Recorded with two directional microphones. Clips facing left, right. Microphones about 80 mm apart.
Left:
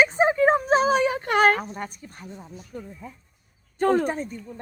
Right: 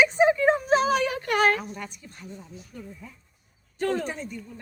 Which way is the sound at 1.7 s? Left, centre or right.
Left.